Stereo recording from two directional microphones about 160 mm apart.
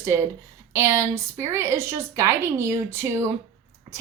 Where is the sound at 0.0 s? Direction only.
15° right (ahead or behind).